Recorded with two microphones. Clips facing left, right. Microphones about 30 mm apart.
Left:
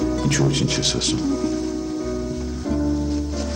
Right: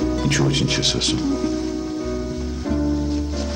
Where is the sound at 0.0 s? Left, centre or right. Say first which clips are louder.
Even; centre.